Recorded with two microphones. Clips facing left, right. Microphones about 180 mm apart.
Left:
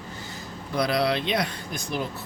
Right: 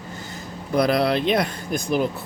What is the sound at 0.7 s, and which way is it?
Speech, 50° right (ahead or behind).